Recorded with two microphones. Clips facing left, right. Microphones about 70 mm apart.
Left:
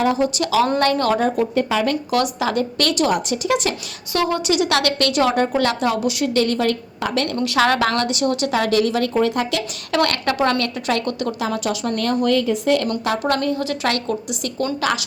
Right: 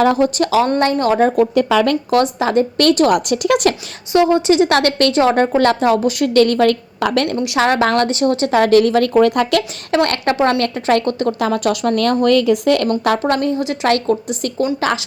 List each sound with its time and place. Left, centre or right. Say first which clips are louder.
0.2 s a woman's voice: right 4 dB; right
0.8 s a woman's voice: right 3 dB; right
1.5 s speech: right 5 dB; right
2.0 s a woman's voice: right 5 dB; right
3.1 s speech: right 5 dB; right
4.1 s a woman's voice: right 7 dB; right
7.3 s a woman's voice: right 2 dB; centre
7.6 s a woman's voice: right 4 dB; right
9.9 s a woman's voice: right 4 dB; right
11.3 s speech: right 6 dB; right
12.2 s speech: right 5 dB; right
13.2 s a woman's voice: right 3 dB; right